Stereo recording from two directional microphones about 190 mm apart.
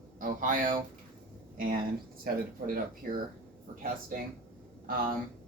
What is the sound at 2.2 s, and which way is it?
Speech, 50° right (ahead or behind).